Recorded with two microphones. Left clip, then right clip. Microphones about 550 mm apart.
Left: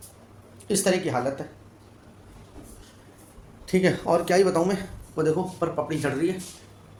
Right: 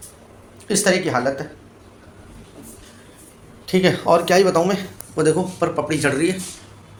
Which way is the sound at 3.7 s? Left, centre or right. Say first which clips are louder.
Right 6 dB; left.